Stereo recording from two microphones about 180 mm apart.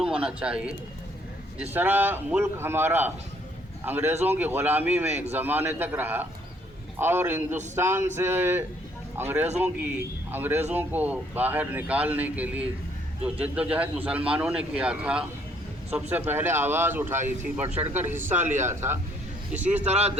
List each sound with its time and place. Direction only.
0.0 s a man's voice: 5° right (ahead or behind)
19.9 s speech: 35° right (ahead or behind)